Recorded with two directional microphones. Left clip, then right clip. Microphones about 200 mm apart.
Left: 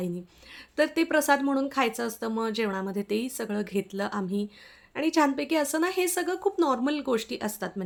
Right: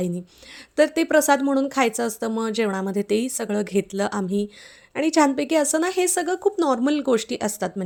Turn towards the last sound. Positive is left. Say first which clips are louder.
# right 7 dB
turn(degrees=-35)  # may be behind; listen again after turning